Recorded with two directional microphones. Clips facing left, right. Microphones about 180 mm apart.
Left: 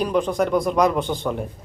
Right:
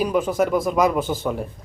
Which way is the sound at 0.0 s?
5° right (ahead or behind).